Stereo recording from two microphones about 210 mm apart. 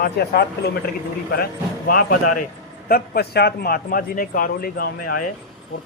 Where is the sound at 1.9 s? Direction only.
45° left (ahead or behind).